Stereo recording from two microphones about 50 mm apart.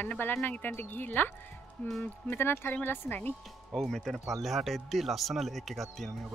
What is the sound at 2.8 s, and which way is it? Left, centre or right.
Speech, left.